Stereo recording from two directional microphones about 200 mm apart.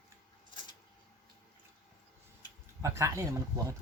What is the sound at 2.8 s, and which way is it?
Speech, 15° right (ahead or behind).